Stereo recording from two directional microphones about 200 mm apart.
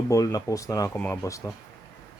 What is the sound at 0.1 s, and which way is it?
Speech, 15° left (ahead or behind).